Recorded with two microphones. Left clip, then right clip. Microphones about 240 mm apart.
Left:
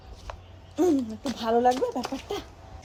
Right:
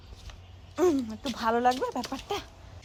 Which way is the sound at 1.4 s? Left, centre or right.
Centre.